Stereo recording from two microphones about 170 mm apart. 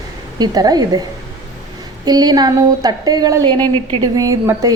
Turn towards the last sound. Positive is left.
turn(degrees=-20)  # may be behind; listen again after turning